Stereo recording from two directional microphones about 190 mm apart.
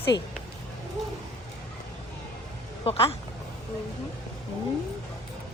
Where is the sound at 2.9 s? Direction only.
30° left (ahead or behind).